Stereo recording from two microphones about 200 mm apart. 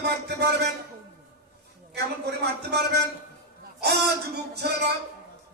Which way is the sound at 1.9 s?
55° right (ahead or behind).